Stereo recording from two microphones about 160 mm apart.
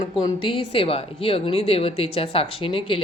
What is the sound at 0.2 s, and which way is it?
Speech, 30° left (ahead or behind).